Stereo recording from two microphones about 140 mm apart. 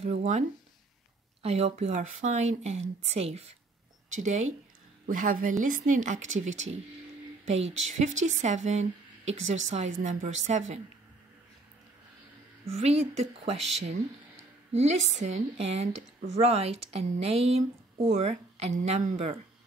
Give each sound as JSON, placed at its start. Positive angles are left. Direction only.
{"t": 0.0, "sound": "a woman's voice", "side_deg": -50}
{"t": 4.1, "sound": "speech", "side_deg": -60}
{"t": 5.0, "sound": "a woman's voice", "side_deg": -75}
{"t": 12.7, "sound": "a woman's voice", "side_deg": -50}
{"t": 14.7, "sound": "a woman's voice", "side_deg": -50}